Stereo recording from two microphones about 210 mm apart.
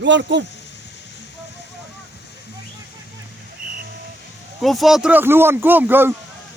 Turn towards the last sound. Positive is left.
turn(degrees=-10)  # may be behind; listen again after turning